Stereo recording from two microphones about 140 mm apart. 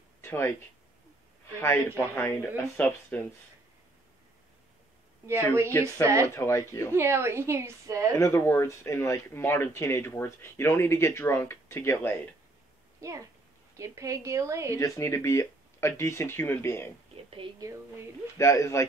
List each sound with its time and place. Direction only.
0.2 s speech: 15° left (ahead or behind)
1.6 s speech: 15° left (ahead or behind)
5.7 s speech: 15° left (ahead or behind)
6.0 s a woman's voice: 20° right (ahead or behind)
6.3 s speech: 20° left (ahead or behind)
6.9 s a woman's voice: 20° right (ahead or behind)
8.2 s speech: 20° left (ahead or behind)
13.0 s a woman's voice: 20° right (ahead or behind)
14.8 s speech: 20° left (ahead or behind)
17.6 s a woman's voice: 20° right (ahead or behind)
18.4 s speech: 20° left (ahead or behind)